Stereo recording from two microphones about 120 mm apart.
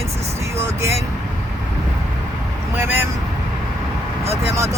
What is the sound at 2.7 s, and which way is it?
Speech, 15° right (ahead or behind).